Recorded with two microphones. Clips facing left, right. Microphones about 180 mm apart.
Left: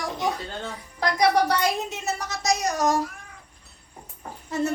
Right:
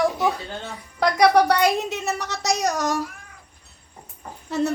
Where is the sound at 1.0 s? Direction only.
65° right (ahead or behind).